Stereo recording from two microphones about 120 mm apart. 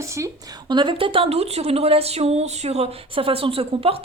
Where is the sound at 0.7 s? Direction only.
40° right (ahead or behind).